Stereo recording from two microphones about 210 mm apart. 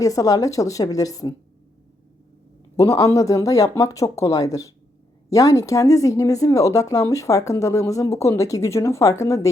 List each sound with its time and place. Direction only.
0.0 s speech: 15° left (ahead or behind)
2.7 s speech: 15° left (ahead or behind)